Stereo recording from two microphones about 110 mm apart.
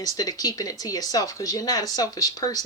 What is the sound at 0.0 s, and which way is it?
Speech, 35° left (ahead or behind).